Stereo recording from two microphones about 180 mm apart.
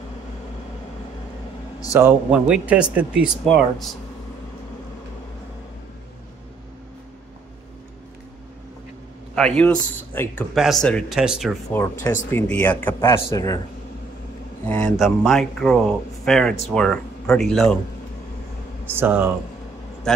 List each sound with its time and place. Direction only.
2.0 s speech: 10° right (ahead or behind)
9.3 s a man's voice: 5° left (ahead or behind)
10.5 s speech: centre (ahead or behind)
11.7 s a man's voice: 15° left (ahead or behind)
14.7 s speech: 5° left (ahead or behind)
18.9 s speech: 10° right (ahead or behind)